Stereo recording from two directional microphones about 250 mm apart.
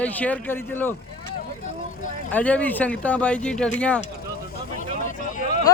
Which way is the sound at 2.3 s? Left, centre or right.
Centre.